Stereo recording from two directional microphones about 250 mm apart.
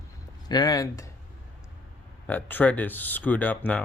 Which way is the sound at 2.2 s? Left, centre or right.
Centre.